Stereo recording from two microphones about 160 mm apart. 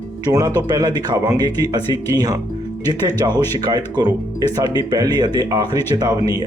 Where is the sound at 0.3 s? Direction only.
25° right (ahead or behind).